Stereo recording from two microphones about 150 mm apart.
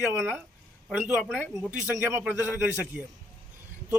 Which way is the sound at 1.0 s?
5° right (ahead or behind).